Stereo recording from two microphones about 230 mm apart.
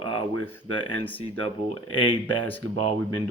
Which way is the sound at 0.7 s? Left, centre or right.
Left.